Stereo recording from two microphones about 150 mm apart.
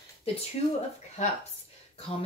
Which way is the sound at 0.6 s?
45° left (ahead or behind).